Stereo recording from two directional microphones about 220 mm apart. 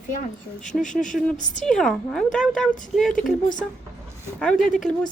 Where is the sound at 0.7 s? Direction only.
5° left (ahead or behind).